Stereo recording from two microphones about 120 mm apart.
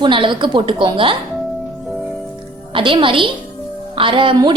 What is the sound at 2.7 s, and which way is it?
A woman's voice, 45° right (ahead or behind).